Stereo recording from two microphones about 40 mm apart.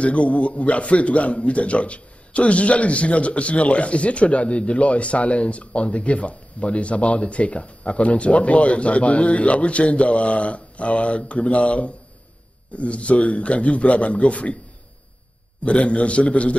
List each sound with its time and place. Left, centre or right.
0.0 s a man's voice: left
15.6 s a man's voice: left